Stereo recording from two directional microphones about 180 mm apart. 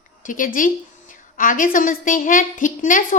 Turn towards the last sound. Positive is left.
turn(degrees=45)  # may be behind; listen again after turning